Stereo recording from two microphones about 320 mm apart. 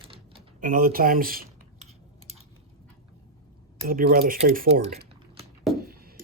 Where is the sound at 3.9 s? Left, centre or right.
Right.